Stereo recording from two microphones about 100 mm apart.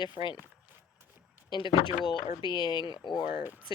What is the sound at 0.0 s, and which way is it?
Speech, 50° left (ahead or behind).